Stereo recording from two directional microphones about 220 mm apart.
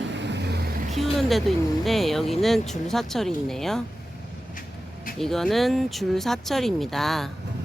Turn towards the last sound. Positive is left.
turn(degrees=0)  # may be behind; listen again after turning